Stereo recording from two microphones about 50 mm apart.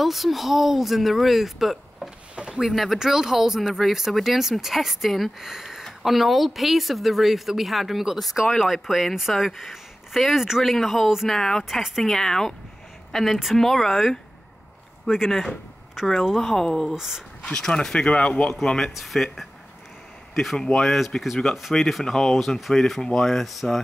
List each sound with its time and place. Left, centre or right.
0.0 s speech: centre
2.3 s a sound: centre
2.6 s speech: centre
11.2 s speech: centre
16.9 s speech: centre
17.5 s speech: centre
20.5 s speech: centre